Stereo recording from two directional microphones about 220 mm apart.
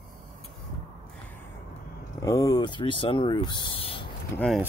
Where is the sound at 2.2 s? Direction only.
15° left (ahead or behind).